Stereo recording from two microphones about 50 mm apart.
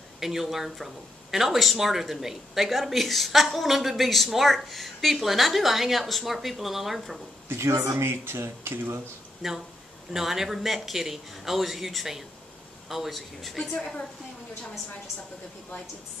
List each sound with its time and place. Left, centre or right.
0.2 s speech: centre
7.4 s speech: right
7.9 s speech: right
9.4 s speech: centre